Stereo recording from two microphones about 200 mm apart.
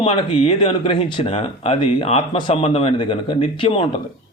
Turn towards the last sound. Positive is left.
turn(degrees=25)  # may be behind; listen again after turning